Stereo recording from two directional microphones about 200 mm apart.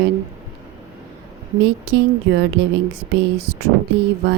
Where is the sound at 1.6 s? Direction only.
55° right (ahead or behind).